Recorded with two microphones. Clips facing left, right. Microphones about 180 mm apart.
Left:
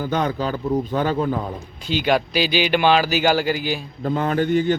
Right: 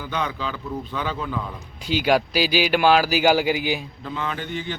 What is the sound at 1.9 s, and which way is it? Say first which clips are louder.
Speech: even; 10° right (ahead or behind).